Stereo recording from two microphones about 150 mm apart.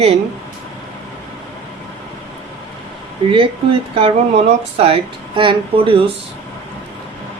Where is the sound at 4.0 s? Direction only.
40° right (ahead or behind).